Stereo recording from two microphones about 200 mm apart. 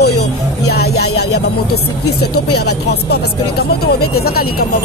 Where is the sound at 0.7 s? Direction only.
55° left (ahead or behind).